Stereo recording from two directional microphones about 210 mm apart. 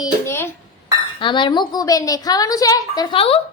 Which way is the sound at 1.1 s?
25° left (ahead or behind).